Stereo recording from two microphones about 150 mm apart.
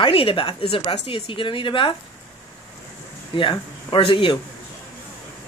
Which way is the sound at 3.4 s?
35° left (ahead or behind).